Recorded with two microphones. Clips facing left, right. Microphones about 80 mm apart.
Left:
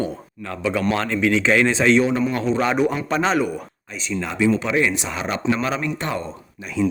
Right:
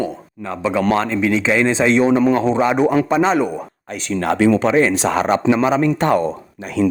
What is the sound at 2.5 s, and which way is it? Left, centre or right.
Speech, centre.